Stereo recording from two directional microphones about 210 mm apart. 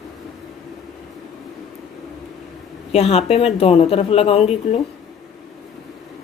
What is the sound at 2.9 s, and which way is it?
Speech, 30° left (ahead or behind).